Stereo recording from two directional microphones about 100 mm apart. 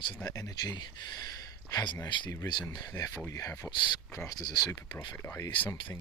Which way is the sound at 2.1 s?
55° left (ahead or behind).